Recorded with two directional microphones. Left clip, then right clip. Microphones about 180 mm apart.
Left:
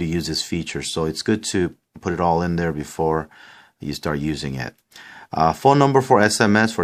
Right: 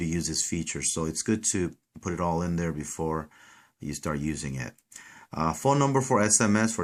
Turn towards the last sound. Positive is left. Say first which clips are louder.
# left 8 dB
turn(degrees=35)  # may be behind; listen again after turning